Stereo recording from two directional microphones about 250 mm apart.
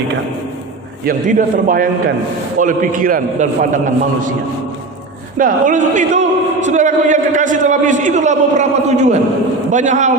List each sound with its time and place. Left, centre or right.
1.0 s a man's voice: right
5.4 s a man's voice: right